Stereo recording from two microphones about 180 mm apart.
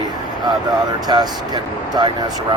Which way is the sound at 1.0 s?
20° right (ahead or behind).